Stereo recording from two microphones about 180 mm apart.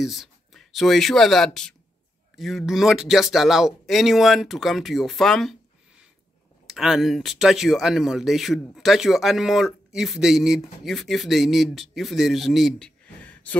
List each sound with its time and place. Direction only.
0.0 s speech: centre (ahead or behind)
6.7 s speech: centre (ahead or behind)